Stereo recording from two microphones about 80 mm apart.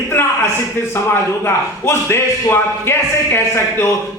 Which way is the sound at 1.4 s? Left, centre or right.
Left.